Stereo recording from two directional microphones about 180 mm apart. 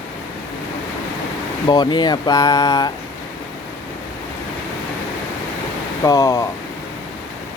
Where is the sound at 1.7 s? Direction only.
25° left (ahead or behind).